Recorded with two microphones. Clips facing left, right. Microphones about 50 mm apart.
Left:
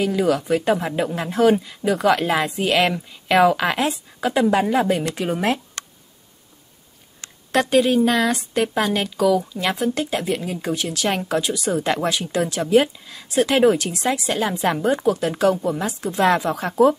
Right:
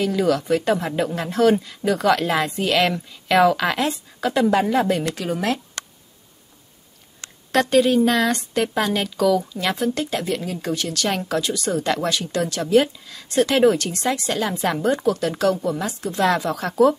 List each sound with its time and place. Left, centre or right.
0.0 s a woman's voice: centre
5.1 s speech: left
7.5 s a woman's voice: centre